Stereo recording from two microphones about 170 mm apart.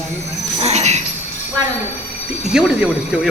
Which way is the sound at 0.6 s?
40° right (ahead or behind).